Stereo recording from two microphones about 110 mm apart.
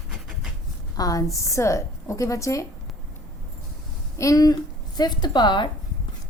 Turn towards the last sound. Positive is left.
turn(degrees=45)  # may be behind; listen again after turning